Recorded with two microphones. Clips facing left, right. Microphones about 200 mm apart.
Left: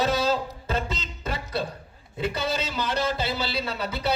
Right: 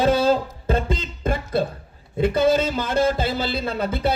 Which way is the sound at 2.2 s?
50° right (ahead or behind).